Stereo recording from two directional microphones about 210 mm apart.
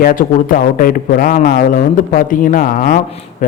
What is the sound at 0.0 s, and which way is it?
A man's voice, 40° left (ahead or behind).